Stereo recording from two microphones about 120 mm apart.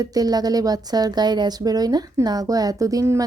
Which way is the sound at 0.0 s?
30° right (ahead or behind).